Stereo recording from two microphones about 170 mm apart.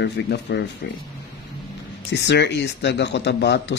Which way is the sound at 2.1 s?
80° left.